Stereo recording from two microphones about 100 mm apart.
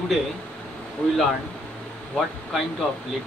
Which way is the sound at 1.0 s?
15° left (ahead or behind).